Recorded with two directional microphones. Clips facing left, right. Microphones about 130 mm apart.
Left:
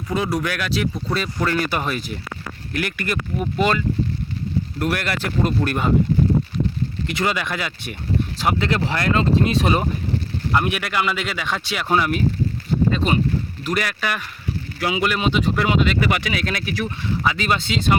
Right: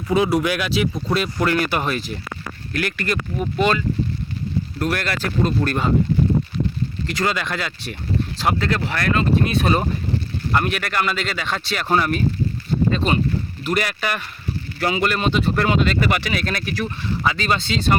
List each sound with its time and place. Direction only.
0.1 s speech: 5° right (ahead or behind)
4.8 s speech: 10° left (ahead or behind)
7.1 s speech: 10° left (ahead or behind)